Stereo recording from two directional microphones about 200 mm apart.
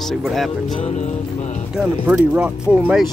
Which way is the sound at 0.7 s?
35° left (ahead or behind).